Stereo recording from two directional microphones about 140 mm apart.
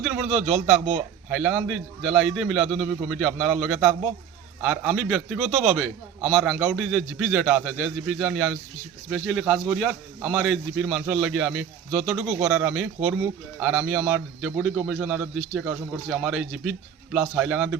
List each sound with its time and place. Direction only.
0.0 s a man's voice: 5° right (ahead or behind)